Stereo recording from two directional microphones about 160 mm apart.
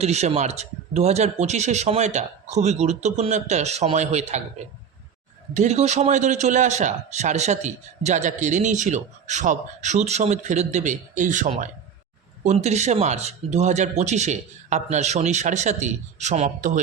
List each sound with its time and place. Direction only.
0.0 s a man's voice: 40° right (ahead or behind)
5.5 s a man's voice: 45° right (ahead or behind)